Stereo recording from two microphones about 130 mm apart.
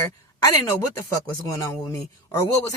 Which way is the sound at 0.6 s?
20° left (ahead or behind).